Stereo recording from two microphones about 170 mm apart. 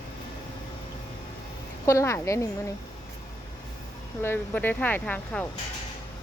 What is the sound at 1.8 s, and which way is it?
Speech, 15° left (ahead or behind).